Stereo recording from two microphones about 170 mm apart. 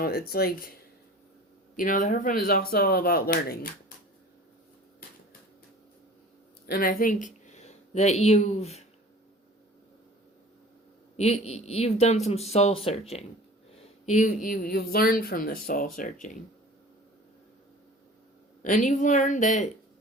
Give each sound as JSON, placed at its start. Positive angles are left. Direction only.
{"t": 0.0, "sound": "speech", "side_deg": 65}
{"t": 1.7, "sound": "speech", "side_deg": 50}
{"t": 6.7, "sound": "speech", "side_deg": 60}
{"t": 11.2, "sound": "speech", "side_deg": 40}
{"t": 18.6, "sound": "speech", "side_deg": 50}